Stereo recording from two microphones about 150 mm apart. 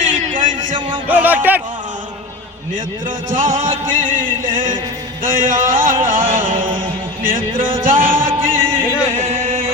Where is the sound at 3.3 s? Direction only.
60° right (ahead or behind).